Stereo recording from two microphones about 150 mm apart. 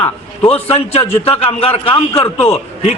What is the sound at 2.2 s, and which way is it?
Speech, 15° left (ahead or behind).